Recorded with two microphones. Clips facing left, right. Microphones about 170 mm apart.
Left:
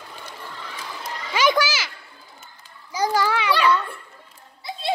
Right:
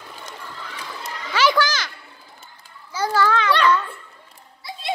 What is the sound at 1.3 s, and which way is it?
Children playing, 15° left (ahead or behind).